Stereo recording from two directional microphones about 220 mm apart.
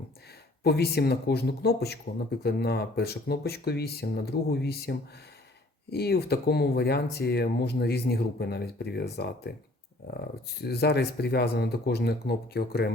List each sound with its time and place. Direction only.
0.6 s speech: 45° left (ahead or behind)